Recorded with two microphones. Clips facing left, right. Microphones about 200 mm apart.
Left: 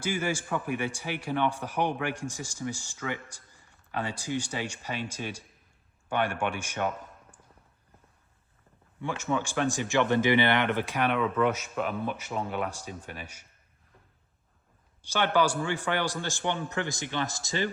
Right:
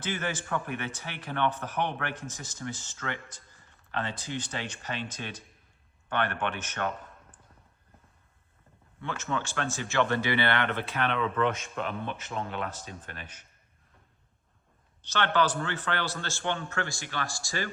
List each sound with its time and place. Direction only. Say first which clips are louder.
0.0 s a man's voice: left 3 dB; 10° left (ahead or behind)
9.0 s a man's voice: left 3 dB; 15° left (ahead or behind)
15.0 s a man's voice: left 2 dB; 10° left (ahead or behind)